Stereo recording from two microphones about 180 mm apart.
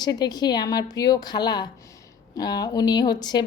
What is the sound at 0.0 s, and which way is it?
Speech, 20° left (ahead or behind).